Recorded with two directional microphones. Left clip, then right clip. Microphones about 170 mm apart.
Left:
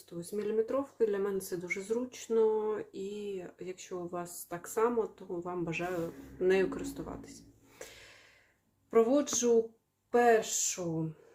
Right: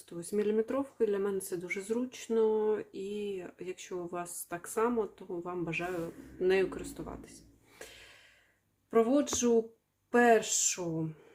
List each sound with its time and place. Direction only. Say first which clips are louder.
0.1 s speech: right 3 dB; 25° right (ahead or behind)
7.8 s a sound: even; 15° right (ahead or behind)
8.9 s speech: left 1 dB; 15° right (ahead or behind)